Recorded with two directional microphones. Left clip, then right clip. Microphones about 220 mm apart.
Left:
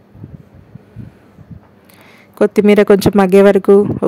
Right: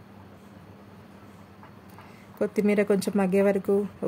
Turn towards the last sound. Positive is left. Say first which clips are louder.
# left 16 dB
turn(degrees=45)  # may be behind; listen again after turning